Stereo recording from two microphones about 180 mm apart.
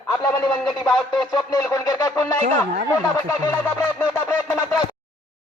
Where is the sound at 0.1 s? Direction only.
5° left (ahead or behind).